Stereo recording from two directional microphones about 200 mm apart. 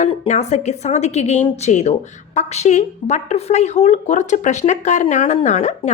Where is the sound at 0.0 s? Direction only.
35° left (ahead or behind).